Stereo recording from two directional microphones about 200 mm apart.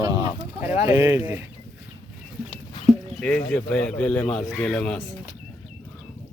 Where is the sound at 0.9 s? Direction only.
15° right (ahead or behind).